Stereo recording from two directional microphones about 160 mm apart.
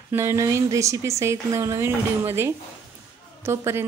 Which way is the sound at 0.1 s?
15° right (ahead or behind).